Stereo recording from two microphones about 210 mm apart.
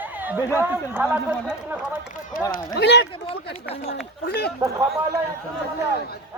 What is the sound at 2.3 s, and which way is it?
Speech, 40° left (ahead or behind).